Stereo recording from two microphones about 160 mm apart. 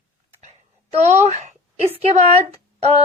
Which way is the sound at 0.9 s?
45° right (ahead or behind).